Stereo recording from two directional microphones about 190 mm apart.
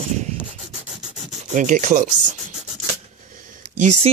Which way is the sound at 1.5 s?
40° right (ahead or behind).